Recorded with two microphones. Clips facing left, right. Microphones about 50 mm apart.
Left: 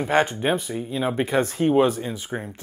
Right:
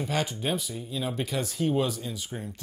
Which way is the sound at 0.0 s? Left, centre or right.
Left.